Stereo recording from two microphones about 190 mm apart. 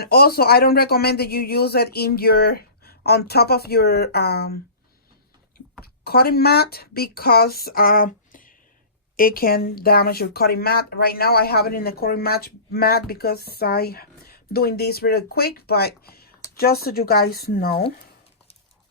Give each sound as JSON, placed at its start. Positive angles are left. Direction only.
{"t": 0.0, "sound": "speech", "side_deg": 55}
{"t": 5.8, "sound": "speech", "side_deg": 55}